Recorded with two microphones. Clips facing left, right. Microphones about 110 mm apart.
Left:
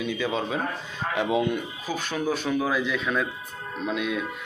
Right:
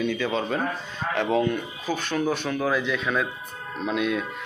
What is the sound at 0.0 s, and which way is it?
Speech, 5° left (ahead or behind).